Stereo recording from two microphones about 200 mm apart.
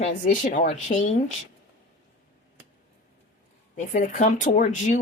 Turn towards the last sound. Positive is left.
turn(degrees=35)  # may be behind; listen again after turning